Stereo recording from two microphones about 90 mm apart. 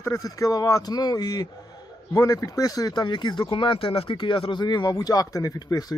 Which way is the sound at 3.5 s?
70° left (ahead or behind).